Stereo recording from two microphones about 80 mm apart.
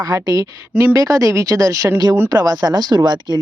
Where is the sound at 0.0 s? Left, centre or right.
Right.